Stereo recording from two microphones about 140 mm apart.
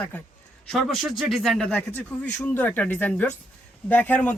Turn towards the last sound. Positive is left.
turn(degrees=15)  # may be behind; listen again after turning